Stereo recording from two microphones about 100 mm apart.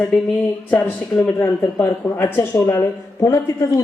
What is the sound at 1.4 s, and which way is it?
Speech, 25° left (ahead or behind).